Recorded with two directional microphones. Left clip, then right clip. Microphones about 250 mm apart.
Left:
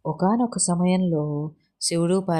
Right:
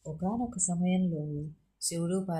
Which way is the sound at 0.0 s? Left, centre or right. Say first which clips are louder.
Left 12 dB; left.